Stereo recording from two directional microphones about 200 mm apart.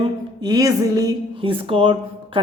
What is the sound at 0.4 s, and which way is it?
Speech, 20° right (ahead or behind).